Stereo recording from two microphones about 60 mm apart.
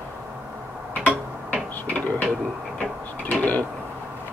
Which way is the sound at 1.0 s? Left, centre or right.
Right.